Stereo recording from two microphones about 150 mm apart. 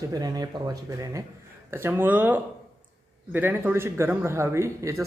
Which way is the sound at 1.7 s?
15° right (ahead or behind).